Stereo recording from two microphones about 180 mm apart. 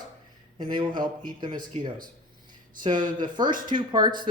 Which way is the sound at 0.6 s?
25° right (ahead or behind).